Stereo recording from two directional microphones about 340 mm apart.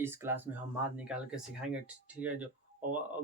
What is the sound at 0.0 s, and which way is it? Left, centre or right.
Speech, centre.